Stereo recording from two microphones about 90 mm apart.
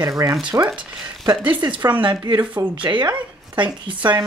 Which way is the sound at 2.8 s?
60° right (ahead or behind).